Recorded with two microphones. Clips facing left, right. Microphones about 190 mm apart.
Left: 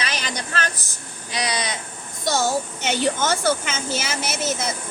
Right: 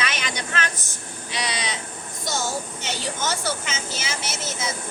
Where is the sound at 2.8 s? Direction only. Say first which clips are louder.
Left 7 dB; 55° left (ahead or behind).